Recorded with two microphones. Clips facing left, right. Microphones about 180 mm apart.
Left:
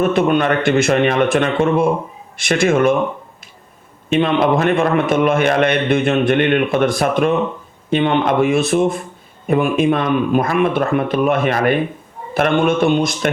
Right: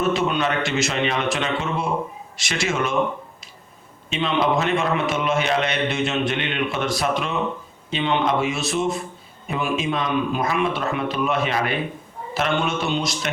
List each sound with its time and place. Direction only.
0.0 s a man's voice: 55° left (ahead or behind)
4.1 s a man's voice: 55° left (ahead or behind)